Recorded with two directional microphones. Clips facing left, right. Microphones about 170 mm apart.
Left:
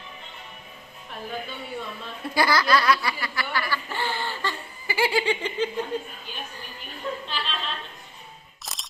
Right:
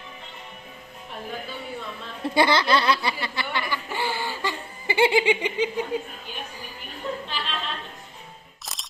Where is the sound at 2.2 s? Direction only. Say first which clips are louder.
Right 2 dB; 25° right (ahead or behind).